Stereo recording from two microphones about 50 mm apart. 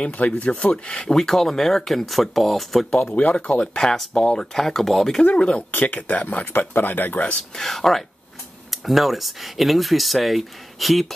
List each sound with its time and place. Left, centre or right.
0.0 s speech: left
0.9 s speech: centre
3.3 s speech: left
3.8 s speech: centre
5.2 s speech: left
5.7 s speech: left
7.5 s speech: centre